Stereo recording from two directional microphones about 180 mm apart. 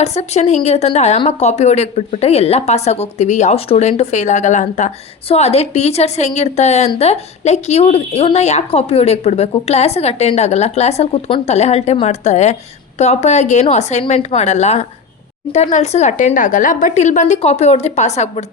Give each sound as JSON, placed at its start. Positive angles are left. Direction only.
{"t": 0.0, "sound": "a woman's voice", "side_deg": 40}